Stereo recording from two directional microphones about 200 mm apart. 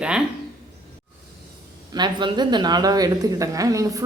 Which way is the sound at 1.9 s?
20° right (ahead or behind).